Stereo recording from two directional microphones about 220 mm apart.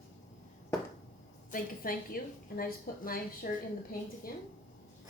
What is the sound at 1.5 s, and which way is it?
A woman's voice, 40° left (ahead or behind).